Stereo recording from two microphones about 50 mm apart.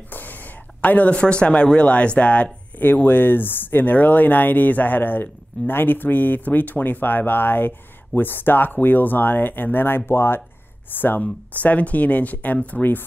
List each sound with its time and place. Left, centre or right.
0.1 s speech: left
2.8 s speech: left
10.9 s speech: left